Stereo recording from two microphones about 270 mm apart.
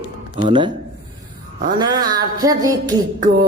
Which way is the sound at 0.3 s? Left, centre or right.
Centre.